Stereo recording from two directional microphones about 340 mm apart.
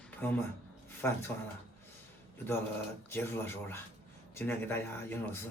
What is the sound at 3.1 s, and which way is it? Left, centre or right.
Speech, centre.